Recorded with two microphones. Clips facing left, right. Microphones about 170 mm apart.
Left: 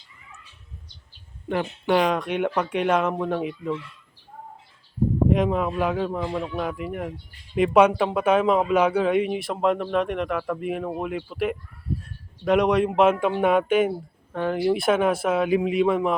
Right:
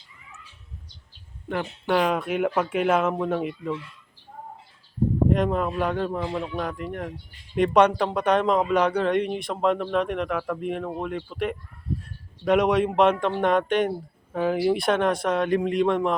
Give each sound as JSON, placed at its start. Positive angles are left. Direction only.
{"t": 1.5, "sound": "a man's voice", "side_deg": 0}
{"t": 5.3, "sound": "a man's voice", "side_deg": 0}